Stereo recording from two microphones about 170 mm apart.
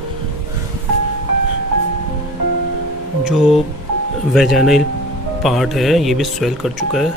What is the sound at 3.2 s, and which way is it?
Speech, centre (ahead or behind).